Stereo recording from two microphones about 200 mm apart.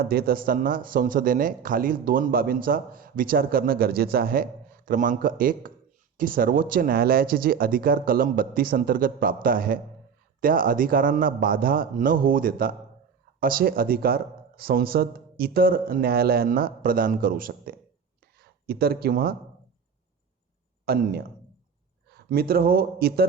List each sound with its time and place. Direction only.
0.0 s speech: 50° right (ahead or behind)
20.8 s speech: 50° right (ahead or behind)